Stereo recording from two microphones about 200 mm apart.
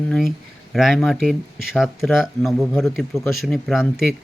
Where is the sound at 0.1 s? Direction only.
Centre (ahead or behind).